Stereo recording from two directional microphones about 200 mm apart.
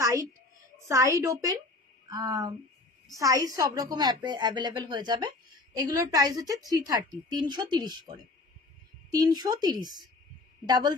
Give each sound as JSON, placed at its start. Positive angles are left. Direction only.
{"t": 0.7, "sound": "a woman's voice", "side_deg": -15}
{"t": 9.1, "sound": "a woman's voice", "side_deg": -20}